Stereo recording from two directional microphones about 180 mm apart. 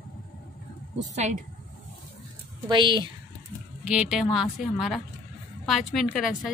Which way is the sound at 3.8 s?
5° right (ahead or behind).